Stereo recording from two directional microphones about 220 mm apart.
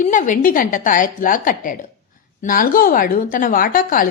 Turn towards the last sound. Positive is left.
turn(degrees=40)  # may be behind; listen again after turning